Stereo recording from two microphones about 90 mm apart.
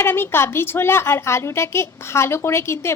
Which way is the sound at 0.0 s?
25° left (ahead or behind).